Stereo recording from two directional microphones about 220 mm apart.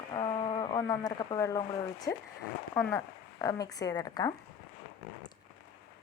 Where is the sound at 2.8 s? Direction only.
10° left (ahead or behind).